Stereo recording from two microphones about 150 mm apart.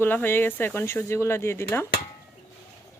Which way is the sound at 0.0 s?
15° left (ahead or behind).